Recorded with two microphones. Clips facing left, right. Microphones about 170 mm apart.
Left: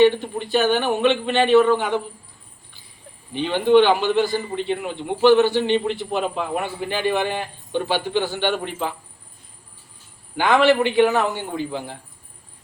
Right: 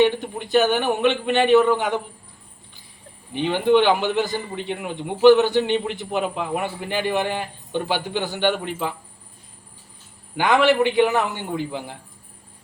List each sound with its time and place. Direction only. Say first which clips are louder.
0.0 s a man's voice: left 3 dB; 15° right (ahead or behind)
3.3 s a man's voice: left 2 dB; 15° right (ahead or behind)
10.3 s a man's voice: left 1 dB; 15° right (ahead or behind)